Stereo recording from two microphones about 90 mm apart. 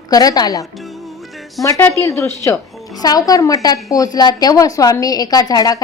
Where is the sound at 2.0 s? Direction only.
30° left (ahead or behind).